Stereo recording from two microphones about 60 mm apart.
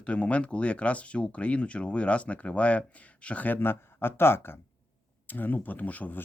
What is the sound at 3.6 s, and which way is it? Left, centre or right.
Speech, left.